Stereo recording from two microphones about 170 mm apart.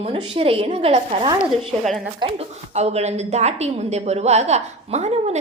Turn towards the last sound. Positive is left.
turn(degrees=-40)  # may be behind; listen again after turning